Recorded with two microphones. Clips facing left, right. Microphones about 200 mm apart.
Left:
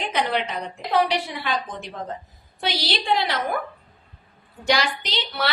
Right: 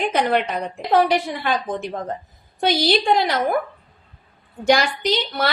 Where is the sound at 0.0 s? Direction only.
50° right (ahead or behind).